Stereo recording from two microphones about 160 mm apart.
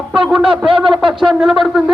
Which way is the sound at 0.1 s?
5° right (ahead or behind).